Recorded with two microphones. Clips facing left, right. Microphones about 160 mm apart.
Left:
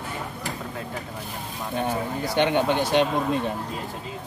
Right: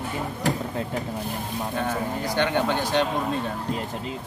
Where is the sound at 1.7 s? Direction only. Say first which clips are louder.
Left 2 dB; 20° left (ahead or behind).